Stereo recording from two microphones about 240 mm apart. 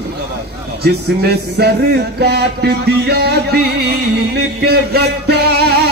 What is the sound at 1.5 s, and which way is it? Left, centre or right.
Speech, right.